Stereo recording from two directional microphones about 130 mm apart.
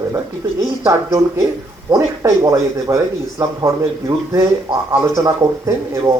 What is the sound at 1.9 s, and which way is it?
Speech, 25° right (ahead or behind).